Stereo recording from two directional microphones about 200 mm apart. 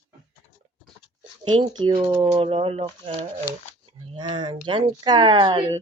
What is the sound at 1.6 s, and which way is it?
Speech, 25° right (ahead or behind).